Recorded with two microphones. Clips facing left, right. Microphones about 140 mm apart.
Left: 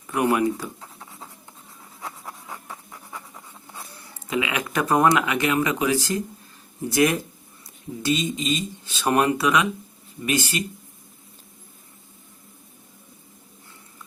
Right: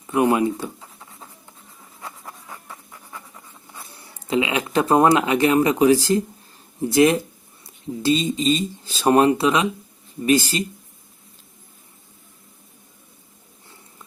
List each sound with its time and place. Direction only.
0.1 s speech: 20° right (ahead or behind)
2.0 s writing: centre (ahead or behind)
4.3 s speech: 25° right (ahead or behind)